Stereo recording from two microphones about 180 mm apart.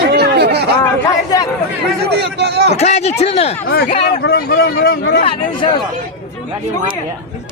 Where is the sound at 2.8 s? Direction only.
35° left (ahead or behind).